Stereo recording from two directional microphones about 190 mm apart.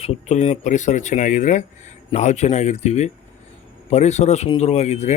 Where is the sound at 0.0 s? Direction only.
35° left (ahead or behind).